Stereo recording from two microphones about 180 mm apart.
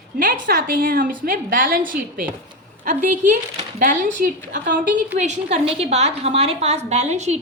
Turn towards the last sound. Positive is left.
turn(degrees=-40)  # may be behind; listen again after turning